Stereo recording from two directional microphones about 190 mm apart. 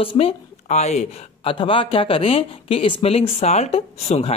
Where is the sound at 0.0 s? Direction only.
30° left (ahead or behind).